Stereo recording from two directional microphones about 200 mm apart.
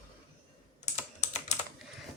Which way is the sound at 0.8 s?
35° left (ahead or behind).